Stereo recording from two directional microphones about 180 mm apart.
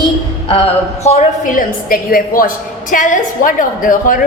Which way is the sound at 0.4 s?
30° left (ahead or behind).